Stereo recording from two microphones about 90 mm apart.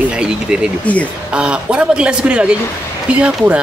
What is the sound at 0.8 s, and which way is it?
Speech, 15° left (ahead or behind).